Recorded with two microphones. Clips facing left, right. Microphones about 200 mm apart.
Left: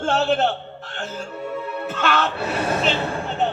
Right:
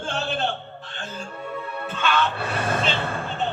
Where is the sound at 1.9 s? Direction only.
70° left (ahead or behind).